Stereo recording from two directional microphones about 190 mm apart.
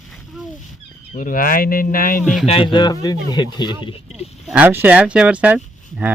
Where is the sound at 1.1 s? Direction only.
45° left (ahead or behind).